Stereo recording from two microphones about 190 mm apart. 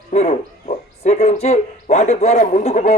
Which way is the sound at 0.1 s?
35° left (ahead or behind).